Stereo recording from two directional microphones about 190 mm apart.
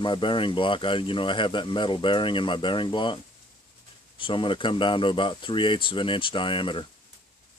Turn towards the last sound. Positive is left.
turn(degrees=25)  # may be behind; listen again after turning